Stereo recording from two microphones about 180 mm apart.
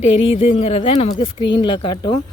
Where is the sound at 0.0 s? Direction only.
30° left (ahead or behind).